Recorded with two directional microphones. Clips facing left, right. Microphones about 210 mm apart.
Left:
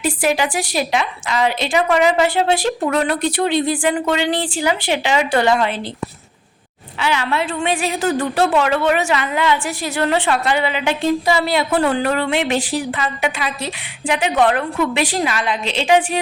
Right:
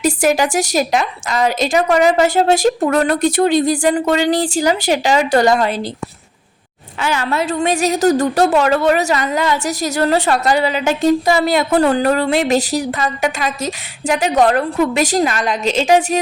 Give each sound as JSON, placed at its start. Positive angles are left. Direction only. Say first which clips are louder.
{"t": 0.0, "sound": "a woman's voice", "louder": "right 4 dB", "side_deg": -45}
{"t": 7.0, "sound": "a woman's voice", "louder": "right 1 dB", "side_deg": -45}